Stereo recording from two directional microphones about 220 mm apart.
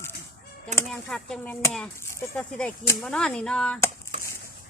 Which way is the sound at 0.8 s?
Centre (ahead or behind).